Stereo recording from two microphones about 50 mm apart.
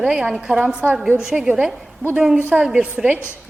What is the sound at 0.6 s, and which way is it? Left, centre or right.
Speech, right.